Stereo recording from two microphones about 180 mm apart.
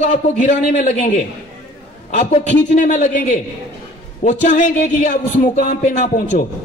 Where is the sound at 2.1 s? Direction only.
40° left (ahead or behind).